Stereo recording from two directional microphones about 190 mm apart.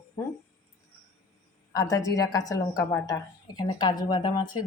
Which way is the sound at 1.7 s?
20° left (ahead or behind).